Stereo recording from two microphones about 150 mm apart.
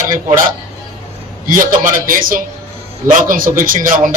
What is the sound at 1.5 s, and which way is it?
A man's voice, 65° right (ahead or behind).